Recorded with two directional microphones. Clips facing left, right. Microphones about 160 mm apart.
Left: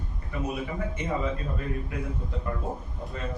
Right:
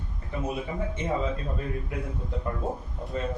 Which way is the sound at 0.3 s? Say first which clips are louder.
Even; 25° right (ahead or behind).